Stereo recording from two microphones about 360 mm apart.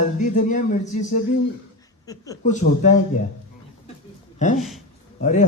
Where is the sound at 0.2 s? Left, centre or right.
Left.